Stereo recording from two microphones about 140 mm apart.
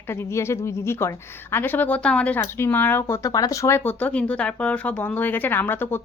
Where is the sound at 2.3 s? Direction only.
20° left (ahead or behind).